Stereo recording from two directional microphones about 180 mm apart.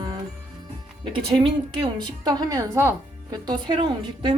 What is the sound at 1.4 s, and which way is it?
Speech, 30° right (ahead or behind).